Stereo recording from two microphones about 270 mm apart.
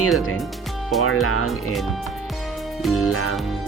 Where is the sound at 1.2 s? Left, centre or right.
Left.